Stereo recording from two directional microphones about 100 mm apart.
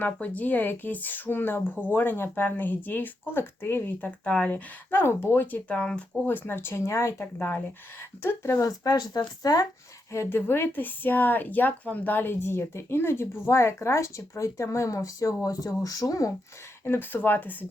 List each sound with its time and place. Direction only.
0.0 s speech: 15° left (ahead or behind); by 9.6 s 40° left (ahead or behind)
10.1 s speech: 25° left (ahead or behind)
16.8 s speech: 20° left (ahead or behind)